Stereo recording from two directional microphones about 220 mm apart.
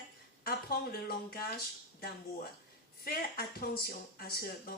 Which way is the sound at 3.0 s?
45° left (ahead or behind).